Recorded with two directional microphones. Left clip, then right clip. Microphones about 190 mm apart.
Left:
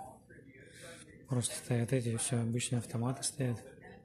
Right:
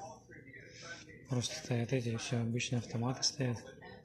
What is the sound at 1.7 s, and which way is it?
Speech, 25° left (ahead or behind).